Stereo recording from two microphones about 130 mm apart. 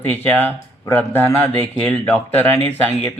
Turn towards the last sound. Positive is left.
turn(degrees=15)  # may be behind; listen again after turning